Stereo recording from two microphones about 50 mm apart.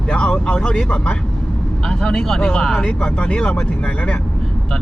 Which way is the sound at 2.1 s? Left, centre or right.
Centre.